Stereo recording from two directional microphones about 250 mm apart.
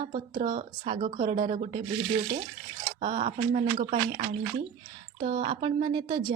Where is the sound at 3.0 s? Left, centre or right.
Right.